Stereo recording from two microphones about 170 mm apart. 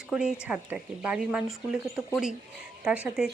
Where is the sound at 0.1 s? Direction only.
5° right (ahead or behind).